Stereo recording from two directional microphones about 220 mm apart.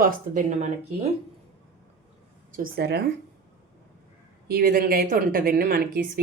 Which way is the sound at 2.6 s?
45° right (ahead or behind).